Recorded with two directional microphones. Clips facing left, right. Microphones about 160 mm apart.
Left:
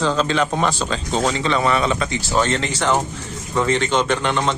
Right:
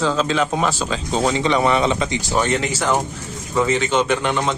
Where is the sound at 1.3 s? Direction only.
20° right (ahead or behind).